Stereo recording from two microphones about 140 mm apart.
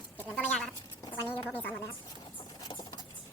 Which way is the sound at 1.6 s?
10° left (ahead or behind).